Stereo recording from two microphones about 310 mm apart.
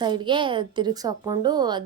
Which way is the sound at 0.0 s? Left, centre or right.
Centre.